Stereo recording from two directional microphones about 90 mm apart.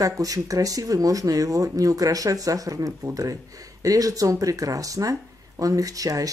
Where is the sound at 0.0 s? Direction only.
40° right (ahead or behind).